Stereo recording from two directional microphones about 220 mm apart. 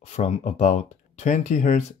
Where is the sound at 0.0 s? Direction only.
30° left (ahead or behind).